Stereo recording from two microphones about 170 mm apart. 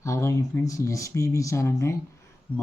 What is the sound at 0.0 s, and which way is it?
Speech, 15° left (ahead or behind).